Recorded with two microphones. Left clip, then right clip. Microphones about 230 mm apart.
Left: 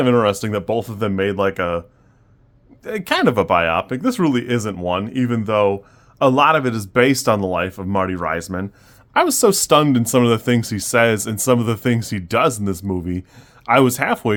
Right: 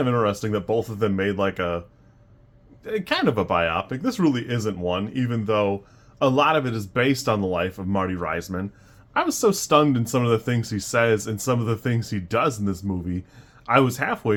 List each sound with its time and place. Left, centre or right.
0.0 s speech: left
2.8 s speech: left